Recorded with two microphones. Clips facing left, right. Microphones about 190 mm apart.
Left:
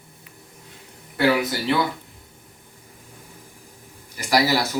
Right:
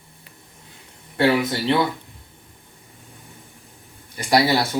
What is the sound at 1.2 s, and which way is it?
Speech, 25° right (ahead or behind).